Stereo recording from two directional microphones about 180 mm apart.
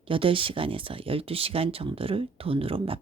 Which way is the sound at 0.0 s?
30° right (ahead or behind).